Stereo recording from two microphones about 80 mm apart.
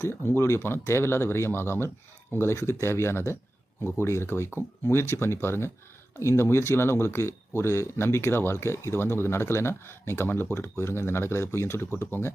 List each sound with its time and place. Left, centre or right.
0.2 s speech: left